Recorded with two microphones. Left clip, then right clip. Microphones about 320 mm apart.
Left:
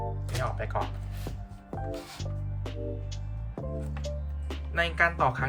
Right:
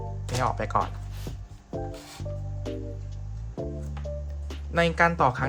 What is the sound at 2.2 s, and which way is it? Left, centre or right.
Music, centre.